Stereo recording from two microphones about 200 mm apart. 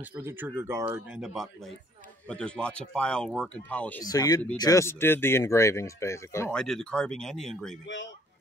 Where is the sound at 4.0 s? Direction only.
20° left (ahead or behind); by 7.8 s centre (ahead or behind).